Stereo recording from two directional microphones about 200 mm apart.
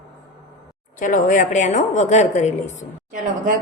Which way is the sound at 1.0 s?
40° left (ahead or behind).